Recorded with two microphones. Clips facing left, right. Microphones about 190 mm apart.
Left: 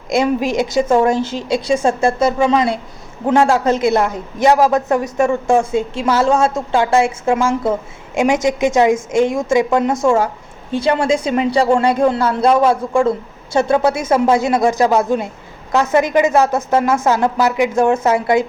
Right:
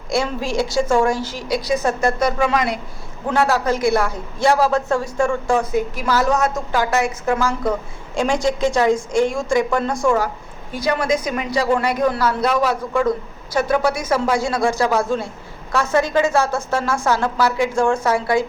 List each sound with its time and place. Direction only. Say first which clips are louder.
0.1 s a woman's voice: left 5 dB; 20° left (ahead or behind)